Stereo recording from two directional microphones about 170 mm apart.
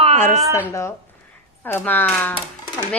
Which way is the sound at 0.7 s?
15° left (ahead or behind).